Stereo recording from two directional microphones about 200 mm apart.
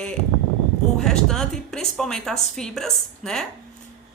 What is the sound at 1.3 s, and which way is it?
A woman's voice, 5° left (ahead or behind).